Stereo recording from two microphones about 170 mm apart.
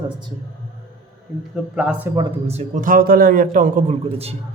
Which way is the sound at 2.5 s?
45° right (ahead or behind).